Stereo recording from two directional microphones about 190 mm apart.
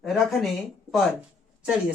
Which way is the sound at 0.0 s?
Centre (ahead or behind).